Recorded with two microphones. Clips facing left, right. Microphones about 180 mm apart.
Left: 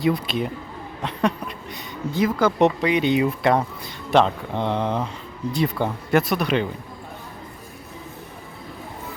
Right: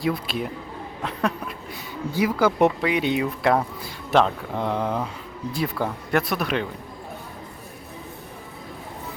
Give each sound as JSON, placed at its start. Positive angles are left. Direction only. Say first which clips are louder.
{"t": 0.0, "sound": "speech", "louder": "left 3 dB", "side_deg": 0}